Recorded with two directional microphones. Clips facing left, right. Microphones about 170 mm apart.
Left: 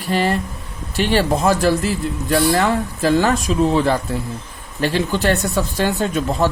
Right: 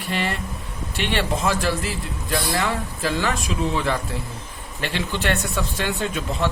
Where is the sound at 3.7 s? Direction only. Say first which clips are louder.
Left 7 dB; 35° left (ahead or behind).